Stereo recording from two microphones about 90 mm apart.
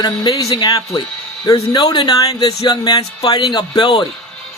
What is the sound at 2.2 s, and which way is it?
A man's voice, 40° left (ahead or behind).